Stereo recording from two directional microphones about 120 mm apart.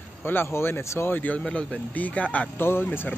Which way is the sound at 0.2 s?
20° left (ahead or behind).